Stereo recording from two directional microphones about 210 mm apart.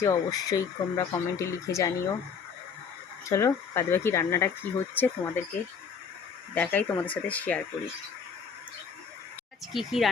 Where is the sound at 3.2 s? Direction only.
15° left (ahead or behind).